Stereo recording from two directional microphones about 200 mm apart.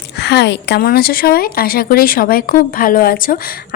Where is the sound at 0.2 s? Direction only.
60° left (ahead or behind).